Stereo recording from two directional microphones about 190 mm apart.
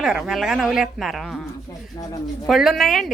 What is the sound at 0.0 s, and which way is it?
A woman's voice, 5° right (ahead or behind).